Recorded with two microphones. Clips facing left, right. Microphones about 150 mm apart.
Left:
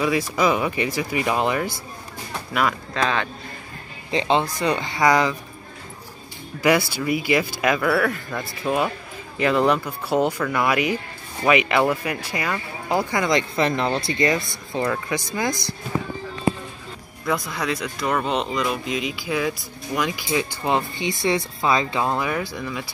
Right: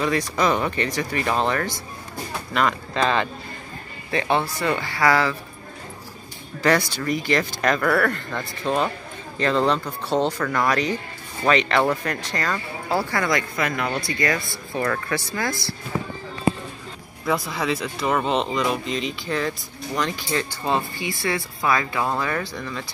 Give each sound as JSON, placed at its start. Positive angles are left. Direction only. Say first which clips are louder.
{"t": 0.0, "sound": "speech", "louder": "left 1 dB", "side_deg": 10}
{"t": 4.1, "sound": "speech", "louder": "left 2 dB", "side_deg": 20}
{"t": 6.9, "sound": "speech", "louder": "left 2 dB", "side_deg": 10}
{"t": 17.5, "sound": "speech", "louder": "right 1 dB", "side_deg": 0}